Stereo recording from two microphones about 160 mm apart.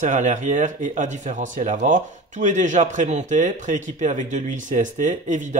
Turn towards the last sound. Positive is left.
turn(degrees=-50)  # may be behind; listen again after turning